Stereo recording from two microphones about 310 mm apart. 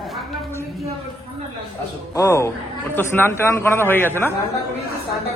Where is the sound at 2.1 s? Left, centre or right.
Centre.